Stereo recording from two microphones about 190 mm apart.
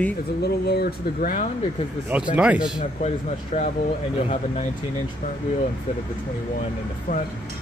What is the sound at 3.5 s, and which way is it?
Speech, 40° left (ahead or behind).